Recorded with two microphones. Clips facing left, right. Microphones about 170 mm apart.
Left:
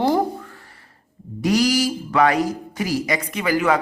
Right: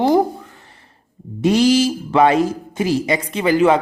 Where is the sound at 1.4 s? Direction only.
25° right (ahead or behind).